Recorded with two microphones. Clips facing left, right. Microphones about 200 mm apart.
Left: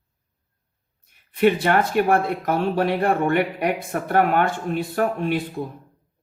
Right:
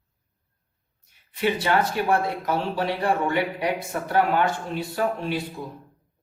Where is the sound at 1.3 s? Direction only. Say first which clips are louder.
Left 5 dB; 55° left (ahead or behind).